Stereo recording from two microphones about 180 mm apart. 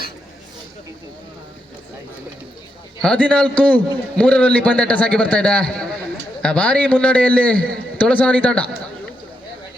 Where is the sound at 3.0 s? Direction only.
5° left (ahead or behind).